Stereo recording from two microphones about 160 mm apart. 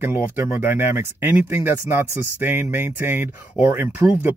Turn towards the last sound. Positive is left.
turn(degrees=-15)  # may be behind; listen again after turning